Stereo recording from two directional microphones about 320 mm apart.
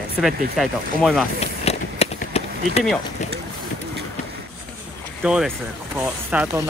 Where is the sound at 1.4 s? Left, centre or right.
Centre.